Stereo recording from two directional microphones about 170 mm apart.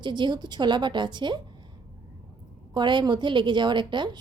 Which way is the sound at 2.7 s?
25° right (ahead or behind).